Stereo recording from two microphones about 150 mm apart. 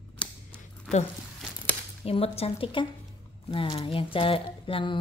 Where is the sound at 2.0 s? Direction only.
40° left (ahead or behind).